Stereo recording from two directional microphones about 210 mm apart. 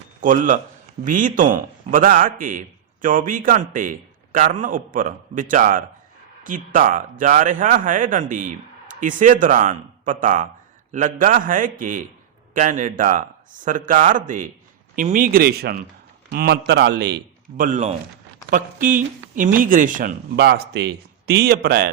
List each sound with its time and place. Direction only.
0.2 s a man's voice: 40° right (ahead or behind)
17.6 s a man's voice: 35° right (ahead or behind)